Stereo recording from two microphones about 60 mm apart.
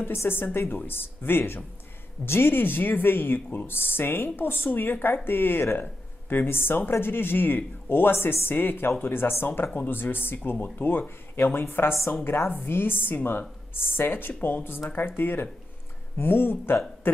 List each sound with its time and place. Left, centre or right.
0.0 s speech: left
17.0 s cough: left